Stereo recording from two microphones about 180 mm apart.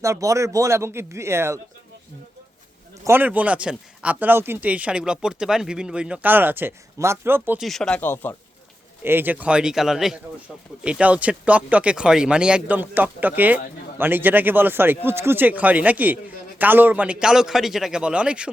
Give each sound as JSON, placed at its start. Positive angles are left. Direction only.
{"t": 0.0, "sound": "speech", "side_deg": -15}
{"t": 3.0, "sound": "speech", "side_deg": -10}
{"t": 7.7, "sound": "speech", "side_deg": 5}
{"t": 9.0, "sound": "a man's voice", "side_deg": -10}